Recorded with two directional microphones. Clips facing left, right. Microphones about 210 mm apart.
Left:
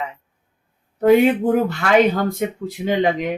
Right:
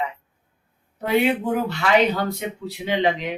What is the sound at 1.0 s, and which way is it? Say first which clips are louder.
Speech: left 7 dB; 50° left (ahead or behind).